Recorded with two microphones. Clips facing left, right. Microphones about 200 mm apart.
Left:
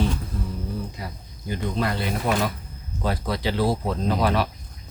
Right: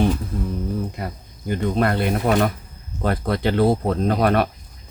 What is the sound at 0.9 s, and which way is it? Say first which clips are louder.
Speech: right 5 dB; 55° right (ahead or behind).